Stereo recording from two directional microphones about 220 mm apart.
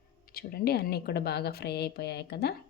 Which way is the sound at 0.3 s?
45° left (ahead or behind).